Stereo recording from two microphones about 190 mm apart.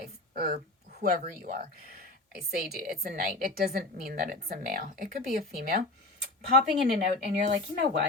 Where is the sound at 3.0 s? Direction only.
50° right (ahead or behind).